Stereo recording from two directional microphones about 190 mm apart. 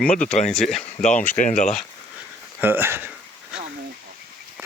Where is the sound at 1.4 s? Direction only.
40° left (ahead or behind).